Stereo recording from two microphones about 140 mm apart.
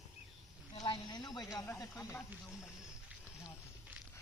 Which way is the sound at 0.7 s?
30° left (ahead or behind).